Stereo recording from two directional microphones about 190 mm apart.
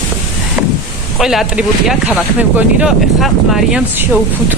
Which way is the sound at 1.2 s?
Centre (ahead or behind).